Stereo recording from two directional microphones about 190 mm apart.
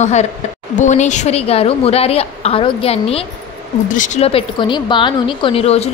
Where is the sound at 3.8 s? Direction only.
40° left (ahead or behind).